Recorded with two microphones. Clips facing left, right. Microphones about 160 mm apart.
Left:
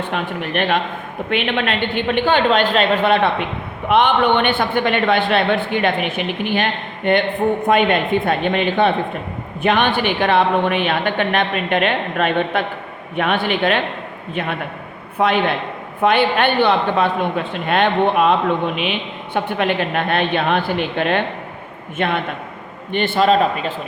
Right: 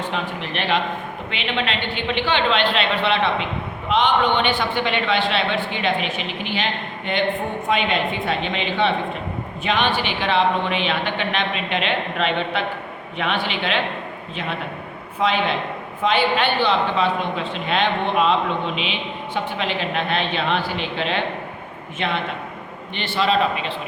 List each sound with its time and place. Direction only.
0.1 s a man's voice: 50° left (ahead or behind)
15.2 s a man's voice: 55° left (ahead or behind)